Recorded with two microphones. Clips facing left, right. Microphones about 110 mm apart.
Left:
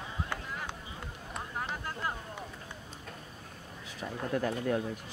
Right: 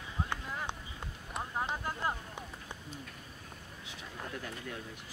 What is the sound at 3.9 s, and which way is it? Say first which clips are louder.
Speech: left 9 dB; 50° left (ahead or behind).